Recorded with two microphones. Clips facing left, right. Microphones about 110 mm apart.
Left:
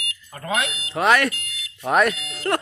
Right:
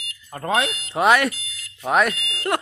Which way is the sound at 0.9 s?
15° right (ahead or behind).